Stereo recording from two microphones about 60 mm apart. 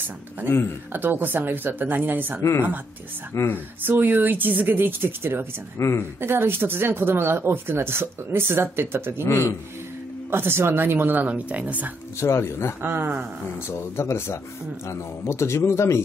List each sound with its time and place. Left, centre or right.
0.5 s speech: left
0.9 s speech: right
3.3 s speech: left
3.8 s speech: right
5.8 s speech: left
6.2 s speech: right
9.3 s speech: left
10.3 s speech: right
12.2 s speech: left
12.8 s speech: right
13.7 s speech: left